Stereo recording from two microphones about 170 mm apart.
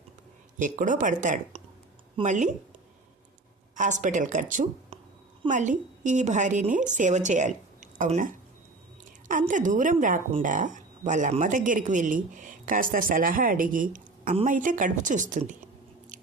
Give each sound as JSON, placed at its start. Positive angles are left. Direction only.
{"t": 0.6, "sound": "a woman's voice", "side_deg": -50}
{"t": 3.8, "sound": "a woman's voice", "side_deg": -45}
{"t": 4.9, "sound": "a sound", "side_deg": -35}
{"t": 5.5, "sound": "a woman's voice", "side_deg": -45}